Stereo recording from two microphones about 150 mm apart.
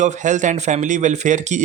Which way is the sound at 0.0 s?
55° right (ahead or behind).